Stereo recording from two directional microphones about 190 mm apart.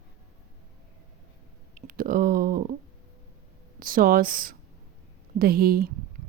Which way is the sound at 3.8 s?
45° right (ahead or behind).